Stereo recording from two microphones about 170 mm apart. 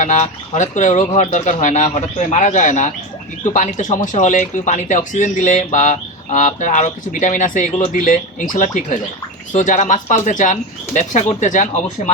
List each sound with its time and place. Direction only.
0.0 s speech: 45° left (ahead or behind)